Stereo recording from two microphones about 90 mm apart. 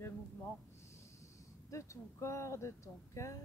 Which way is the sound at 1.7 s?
35° left (ahead or behind).